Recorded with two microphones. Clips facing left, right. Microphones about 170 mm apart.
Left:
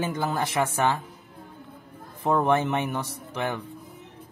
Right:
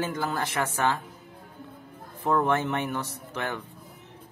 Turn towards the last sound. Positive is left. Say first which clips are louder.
# left 3 dB
turn(degrees=15)  # may be behind; listen again after turning